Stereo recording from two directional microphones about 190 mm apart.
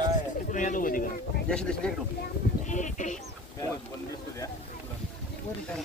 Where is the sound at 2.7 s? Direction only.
40° left (ahead or behind).